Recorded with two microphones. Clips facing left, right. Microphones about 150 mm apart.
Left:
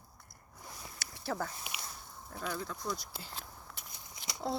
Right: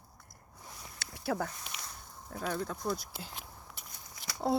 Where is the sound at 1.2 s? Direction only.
60° right (ahead or behind).